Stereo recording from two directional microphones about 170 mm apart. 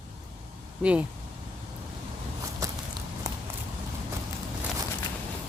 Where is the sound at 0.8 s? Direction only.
5° right (ahead or behind).